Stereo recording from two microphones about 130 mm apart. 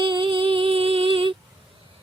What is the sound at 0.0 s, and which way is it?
Music, 40° right (ahead or behind).